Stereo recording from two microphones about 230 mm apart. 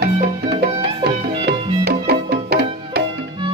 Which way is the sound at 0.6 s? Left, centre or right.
Right.